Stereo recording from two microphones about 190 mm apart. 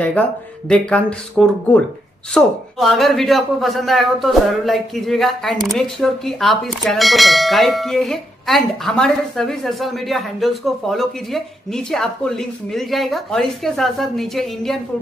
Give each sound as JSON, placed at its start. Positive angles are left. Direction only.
{"t": 0.2, "sound": "speech", "side_deg": 5}